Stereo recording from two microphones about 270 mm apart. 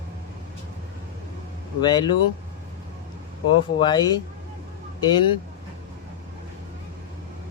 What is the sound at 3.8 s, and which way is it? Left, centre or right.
Speech, centre.